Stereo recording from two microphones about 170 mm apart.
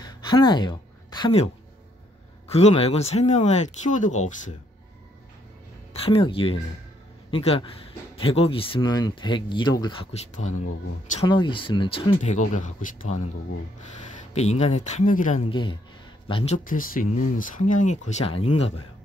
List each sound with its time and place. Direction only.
0.0 s a sound: 25° left (ahead or behind)
2.4 s speech: 40° left (ahead or behind)
6.0 s a man's voice: 30° left (ahead or behind)
10.1 s speech: 45° left (ahead or behind)
11.2 s speech: 30° left (ahead or behind)
12.2 s speech: 45° left (ahead or behind)
14.3 s speech: 40° left (ahead or behind)
15.5 s speech: 25° left (ahead or behind)
16.5 s speech: 55° left (ahead or behind); by 18.7 s 35° left (ahead or behind)